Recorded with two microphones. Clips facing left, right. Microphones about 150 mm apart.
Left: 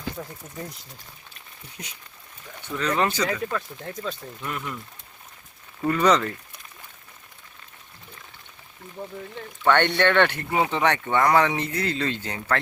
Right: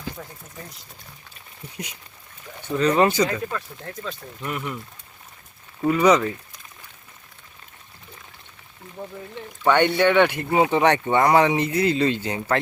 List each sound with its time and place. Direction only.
0.2 s speech: 10° left (ahead or behind)
2.7 s speech: 25° right (ahead or behind)
3.2 s speech: 5° left (ahead or behind)
4.4 s speech: 10° right (ahead or behind)
5.8 s speech: 10° right (ahead or behind)
9.6 s speech: 10° right (ahead or behind)